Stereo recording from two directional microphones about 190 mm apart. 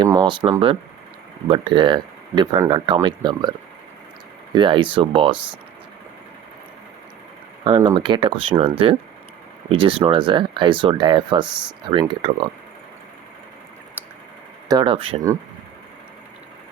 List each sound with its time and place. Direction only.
0.0 s speech: 20° right (ahead or behind)
4.5 s speech: 25° right (ahead or behind)
7.8 s speech: 25° right (ahead or behind)
14.7 s speech: 25° right (ahead or behind)